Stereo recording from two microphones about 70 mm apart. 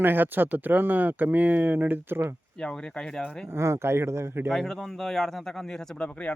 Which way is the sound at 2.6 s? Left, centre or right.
Centre.